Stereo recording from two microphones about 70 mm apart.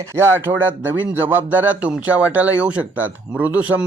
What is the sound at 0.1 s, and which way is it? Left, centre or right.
Speech, right.